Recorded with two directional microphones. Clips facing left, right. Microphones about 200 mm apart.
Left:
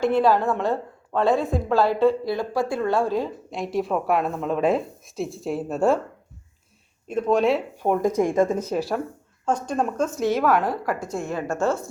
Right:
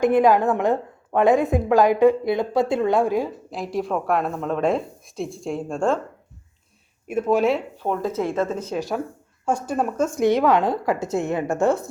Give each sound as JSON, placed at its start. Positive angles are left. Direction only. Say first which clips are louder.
{"t": 0.0, "sound": "a woman's voice", "louder": "right 3 dB", "side_deg": -15}
{"t": 3.5, "sound": "a woman's voice", "louder": "left 1 dB", "side_deg": 0}
{"t": 7.1, "sound": "a woman's voice", "louder": "right 1 dB", "side_deg": -5}
{"t": 7.8, "sound": "speech", "louder": "left 3 dB", "side_deg": 15}
{"t": 9.5, "sound": "a woman's voice", "louder": "right 1 dB", "side_deg": -10}
{"t": 11.0, "sound": "a woman's voice", "louder": "right 5 dB", "side_deg": -75}
{"t": 11.3, "sound": "a woman's voice", "louder": "right 3 dB", "side_deg": -20}